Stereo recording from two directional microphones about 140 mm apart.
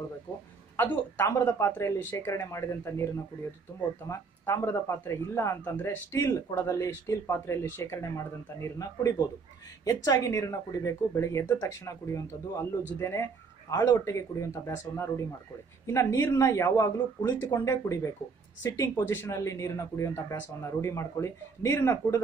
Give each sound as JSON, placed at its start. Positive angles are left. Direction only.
{"t": 0.7, "sound": "speech", "side_deg": 15}
{"t": 4.1, "sound": "speech", "side_deg": 15}
{"t": 15.9, "sound": "speech", "side_deg": 20}